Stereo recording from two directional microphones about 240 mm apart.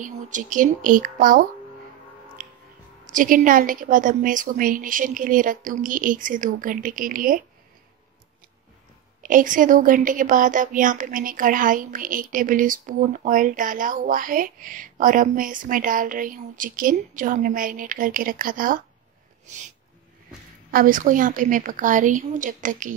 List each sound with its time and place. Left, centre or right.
0.0 s a woman's voice: right
2.4 s music: right
3.1 s a woman's voice: right
9.2 s a woman's voice: right
20.7 s a woman's voice: right